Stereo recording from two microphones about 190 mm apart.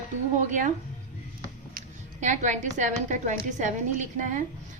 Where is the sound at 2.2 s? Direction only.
40° right (ahead or behind).